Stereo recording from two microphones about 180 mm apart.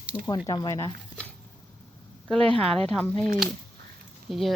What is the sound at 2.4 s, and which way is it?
Speech, 30° right (ahead or behind).